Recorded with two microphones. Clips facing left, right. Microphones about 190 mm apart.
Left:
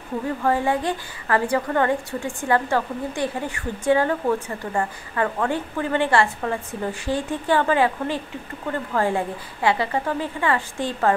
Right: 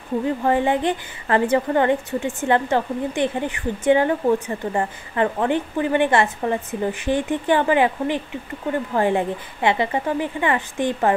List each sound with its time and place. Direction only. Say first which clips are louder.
0.4 s a woman's voice: right 1 dB; 20° right (ahead or behind)